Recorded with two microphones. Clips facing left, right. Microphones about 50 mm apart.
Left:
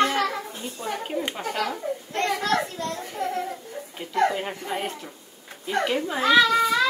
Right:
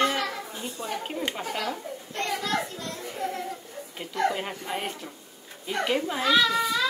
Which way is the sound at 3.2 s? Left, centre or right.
Left.